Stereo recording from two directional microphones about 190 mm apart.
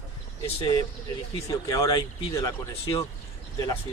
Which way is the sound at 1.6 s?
20° left (ahead or behind).